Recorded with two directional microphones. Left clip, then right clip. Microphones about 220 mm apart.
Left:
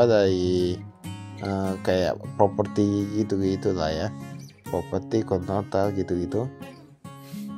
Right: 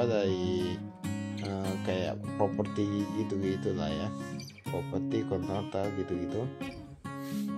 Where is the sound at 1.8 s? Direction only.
30° left (ahead or behind).